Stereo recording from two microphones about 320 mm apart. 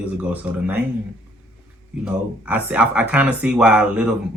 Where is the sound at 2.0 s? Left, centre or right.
Centre.